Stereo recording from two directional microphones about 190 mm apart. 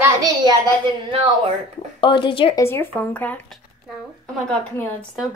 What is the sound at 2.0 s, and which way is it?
Speech, 25° left (ahead or behind).